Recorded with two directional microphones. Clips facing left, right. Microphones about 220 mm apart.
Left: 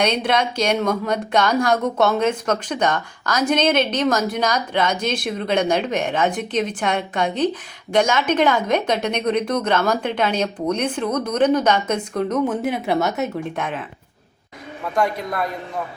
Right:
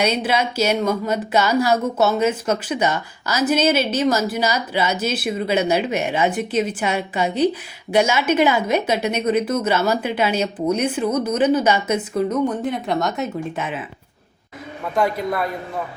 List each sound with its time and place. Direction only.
0.0 s speech: 5° right (ahead or behind)
14.9 s speech: 5° right (ahead or behind)